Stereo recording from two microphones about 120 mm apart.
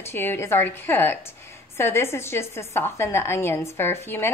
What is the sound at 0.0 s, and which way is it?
A woman's voice, 20° left (ahead or behind).